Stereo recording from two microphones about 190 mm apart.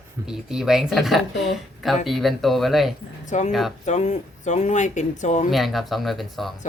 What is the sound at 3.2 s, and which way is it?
Speech, 40° left (ahead or behind).